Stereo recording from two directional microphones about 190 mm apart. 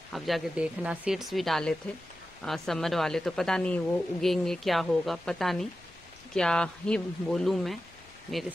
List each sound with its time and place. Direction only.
0.1 s speech: centre (ahead or behind)